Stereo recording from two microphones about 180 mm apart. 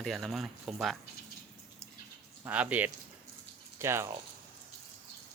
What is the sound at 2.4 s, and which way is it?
Speech, 10° right (ahead or behind).